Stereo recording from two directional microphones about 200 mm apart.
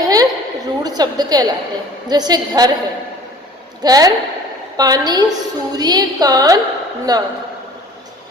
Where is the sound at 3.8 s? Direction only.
20° right (ahead or behind).